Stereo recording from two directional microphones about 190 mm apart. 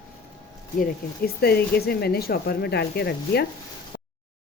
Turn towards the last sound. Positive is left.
turn(degrees=60)  # may be behind; listen again after turning